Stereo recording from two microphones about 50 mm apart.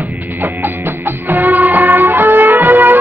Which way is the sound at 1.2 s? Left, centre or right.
Right.